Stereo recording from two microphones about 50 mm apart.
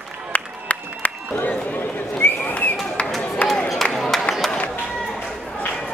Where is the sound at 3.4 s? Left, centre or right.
Left.